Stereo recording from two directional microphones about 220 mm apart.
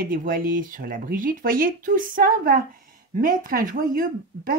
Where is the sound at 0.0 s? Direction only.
40° right (ahead or behind).